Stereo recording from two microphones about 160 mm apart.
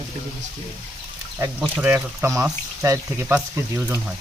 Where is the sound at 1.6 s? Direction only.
10° right (ahead or behind).